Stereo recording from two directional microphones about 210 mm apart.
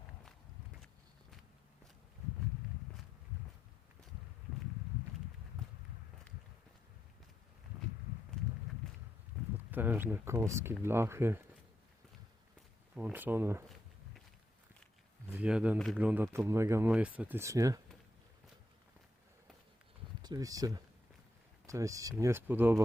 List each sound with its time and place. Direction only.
9.7 s speech: 10° right (ahead or behind)
12.9 s speech: 5° right (ahead or behind)
15.3 s speech: 5° right (ahead or behind)
20.2 s speech: 15° right (ahead or behind)